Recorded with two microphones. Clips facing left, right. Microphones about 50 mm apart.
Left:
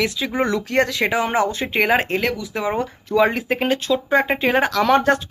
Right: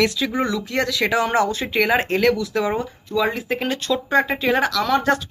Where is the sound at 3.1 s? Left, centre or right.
Left.